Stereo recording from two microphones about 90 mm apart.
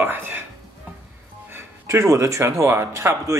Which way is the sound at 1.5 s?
30° right (ahead or behind).